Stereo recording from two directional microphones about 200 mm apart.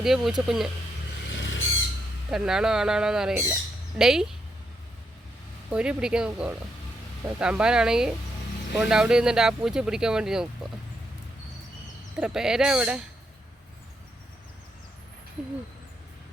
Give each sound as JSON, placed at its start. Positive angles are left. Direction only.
{"t": 0.0, "sound": "speech", "side_deg": 0}
{"t": 1.3, "sound": "vehicle", "side_deg": 70}
{"t": 2.3, "sound": "speech", "side_deg": -5}
{"t": 5.7, "sound": "speech", "side_deg": -5}
{"t": 12.1, "sound": "speech", "side_deg": -5}